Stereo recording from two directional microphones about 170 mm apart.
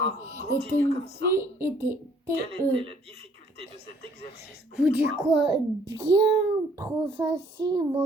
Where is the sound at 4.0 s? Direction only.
70° left (ahead or behind).